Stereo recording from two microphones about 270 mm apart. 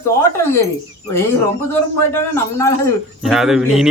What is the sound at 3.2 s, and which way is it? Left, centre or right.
Speech, centre.